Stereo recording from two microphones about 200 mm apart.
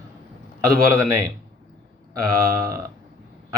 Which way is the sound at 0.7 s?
15° right (ahead or behind).